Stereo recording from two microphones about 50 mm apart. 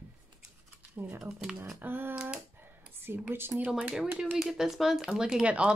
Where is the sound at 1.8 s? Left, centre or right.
Right.